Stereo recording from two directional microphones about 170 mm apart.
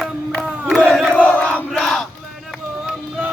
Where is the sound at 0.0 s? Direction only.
Centre (ahead or behind).